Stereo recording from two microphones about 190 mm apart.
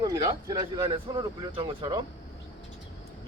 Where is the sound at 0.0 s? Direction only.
20° right (ahead or behind).